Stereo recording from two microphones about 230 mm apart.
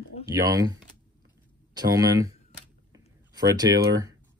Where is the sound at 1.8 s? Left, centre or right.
Centre.